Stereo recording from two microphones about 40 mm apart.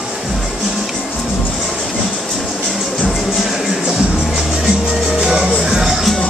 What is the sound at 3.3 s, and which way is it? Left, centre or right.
Music, centre.